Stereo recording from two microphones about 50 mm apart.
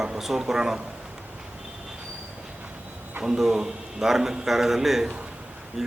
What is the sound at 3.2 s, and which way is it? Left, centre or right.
Speech, centre.